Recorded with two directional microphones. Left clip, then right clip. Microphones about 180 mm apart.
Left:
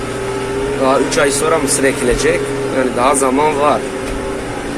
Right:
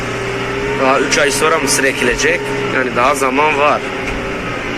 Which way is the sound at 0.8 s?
10° left (ahead or behind).